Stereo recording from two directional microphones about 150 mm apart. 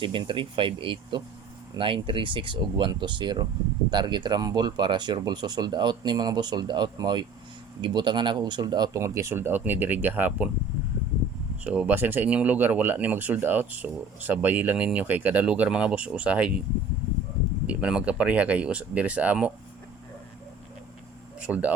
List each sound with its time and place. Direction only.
0.0 s speech: 35° right (ahead or behind); by 10.5 s 10° right (ahead or behind)
11.6 s speech: 10° right (ahead or behind)
17.7 s speech: 5° right (ahead or behind)
21.4 s speech: 10° right (ahead or behind)